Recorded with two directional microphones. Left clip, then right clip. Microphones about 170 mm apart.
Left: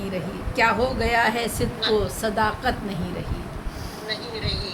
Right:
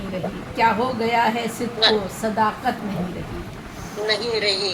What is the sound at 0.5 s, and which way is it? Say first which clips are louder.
Speech: right 1 dB; 5° right (ahead or behind).